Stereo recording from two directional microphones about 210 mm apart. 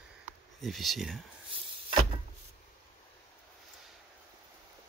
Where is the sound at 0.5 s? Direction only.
Centre (ahead or behind).